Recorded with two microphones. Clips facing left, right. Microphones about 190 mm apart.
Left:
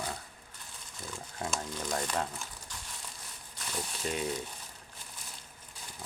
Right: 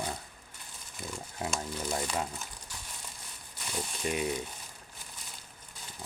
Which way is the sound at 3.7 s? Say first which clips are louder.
Right 2 dB; 10° right (ahead or behind).